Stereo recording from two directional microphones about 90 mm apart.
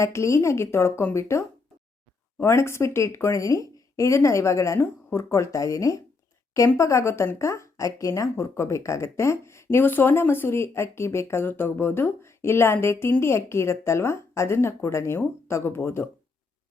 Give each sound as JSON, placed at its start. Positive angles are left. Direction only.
{"t": 0.0, "sound": "a woman's voice", "side_deg": 30}